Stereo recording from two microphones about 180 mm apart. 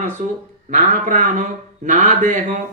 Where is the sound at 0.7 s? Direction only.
45° right (ahead or behind).